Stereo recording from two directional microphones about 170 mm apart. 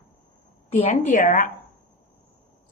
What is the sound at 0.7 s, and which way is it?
Speech, 45° left (ahead or behind).